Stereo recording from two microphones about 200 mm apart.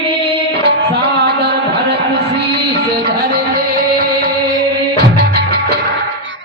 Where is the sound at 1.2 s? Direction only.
55° right (ahead or behind).